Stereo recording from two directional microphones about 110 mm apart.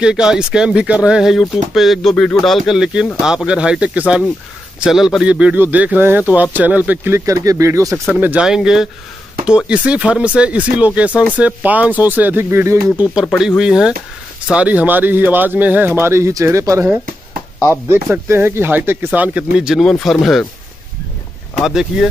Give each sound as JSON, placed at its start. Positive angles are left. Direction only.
{"t": 0.0, "sound": "speech", "side_deg": -5}
{"t": 8.2, "sound": "speech", "side_deg": -15}
{"t": 13.2, "sound": "speech", "side_deg": 0}
{"t": 17.9, "sound": "speech", "side_deg": -20}
{"t": 21.5, "sound": "speech", "side_deg": -5}